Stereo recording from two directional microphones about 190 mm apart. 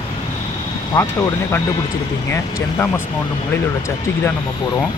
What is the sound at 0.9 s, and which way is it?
Speech, 15° left (ahead or behind).